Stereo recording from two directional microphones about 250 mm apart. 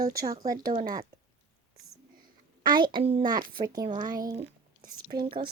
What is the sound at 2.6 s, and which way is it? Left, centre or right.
A child's voice, centre.